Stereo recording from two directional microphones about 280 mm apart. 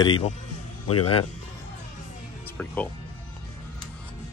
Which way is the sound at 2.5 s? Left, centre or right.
Centre.